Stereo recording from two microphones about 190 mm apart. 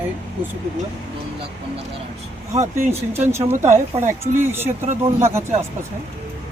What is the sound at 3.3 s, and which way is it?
Speech, 15° right (ahead or behind).